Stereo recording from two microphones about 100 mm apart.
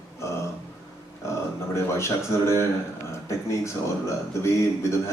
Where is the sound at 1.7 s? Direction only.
30° left (ahead or behind).